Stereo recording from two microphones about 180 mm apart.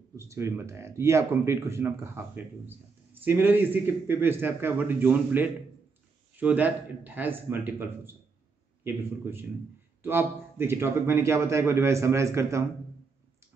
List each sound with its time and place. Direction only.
0.1 s a man's voice: 15° right (ahead or behind)